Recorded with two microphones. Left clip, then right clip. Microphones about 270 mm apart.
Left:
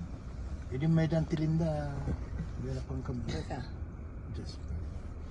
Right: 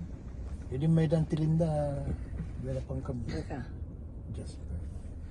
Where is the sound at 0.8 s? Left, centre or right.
Right.